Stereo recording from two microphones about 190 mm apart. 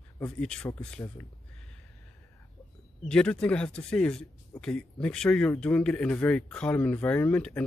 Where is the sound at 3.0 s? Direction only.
5° left (ahead or behind).